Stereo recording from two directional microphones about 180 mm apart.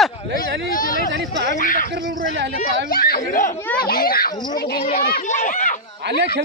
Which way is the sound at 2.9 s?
55° left (ahead or behind).